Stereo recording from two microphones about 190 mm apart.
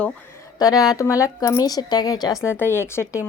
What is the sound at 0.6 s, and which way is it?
Speech, 20° left (ahead or behind).